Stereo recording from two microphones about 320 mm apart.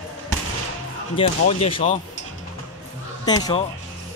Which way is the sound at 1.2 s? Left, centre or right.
Centre.